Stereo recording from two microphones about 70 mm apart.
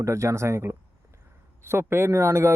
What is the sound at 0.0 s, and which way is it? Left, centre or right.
Speech, right.